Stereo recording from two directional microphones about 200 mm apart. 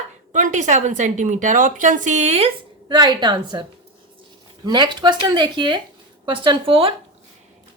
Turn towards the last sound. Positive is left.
turn(degrees=-25)  # may be behind; listen again after turning